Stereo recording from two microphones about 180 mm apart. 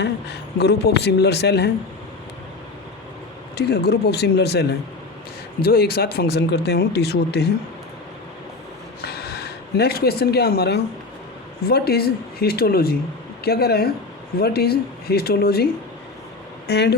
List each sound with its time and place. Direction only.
0.0 s speech: 70° left (ahead or behind)
3.5 s speech: 65° left (ahead or behind)
9.0 s speech: 60° left (ahead or behind)
16.6 s speech: 65° left (ahead or behind)